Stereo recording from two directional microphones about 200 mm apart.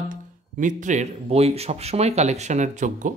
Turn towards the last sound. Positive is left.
turn(degrees=-40)  # may be behind; listen again after turning